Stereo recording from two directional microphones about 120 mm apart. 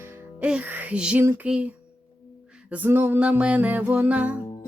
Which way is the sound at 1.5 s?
10° right (ahead or behind).